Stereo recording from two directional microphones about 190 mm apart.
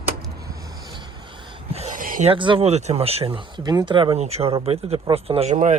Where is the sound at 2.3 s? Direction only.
25° right (ahead or behind).